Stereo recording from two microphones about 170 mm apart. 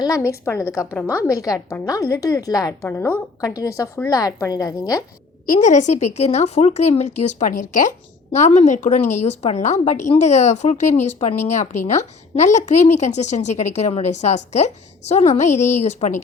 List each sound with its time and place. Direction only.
0.0 s a woman's voice: 20° left (ahead or behind)
5.5 s a woman's voice: 45° left (ahead or behind)